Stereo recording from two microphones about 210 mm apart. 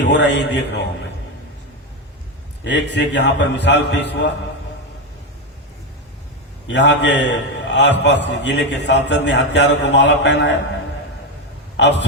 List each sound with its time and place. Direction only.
0.0 s a man's voice: 55° left (ahead or behind)
2.6 s a man's voice: 55° left (ahead or behind)
6.7 s a man's voice: 55° left (ahead or behind)
11.8 s a man's voice: 55° left (ahead or behind)